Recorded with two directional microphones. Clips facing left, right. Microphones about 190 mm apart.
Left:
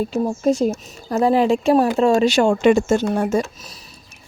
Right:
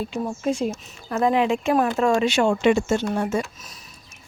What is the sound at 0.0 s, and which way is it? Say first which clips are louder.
Speech: left 6 dB; 40° left (ahead or behind).